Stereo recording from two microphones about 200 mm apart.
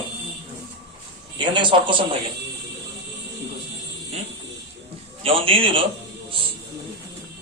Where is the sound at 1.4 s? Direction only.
25° right (ahead or behind).